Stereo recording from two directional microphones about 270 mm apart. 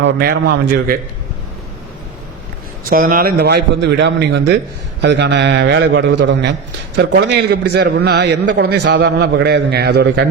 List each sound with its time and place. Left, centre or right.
0.0 s a man's voice: right
2.9 s a man's voice: right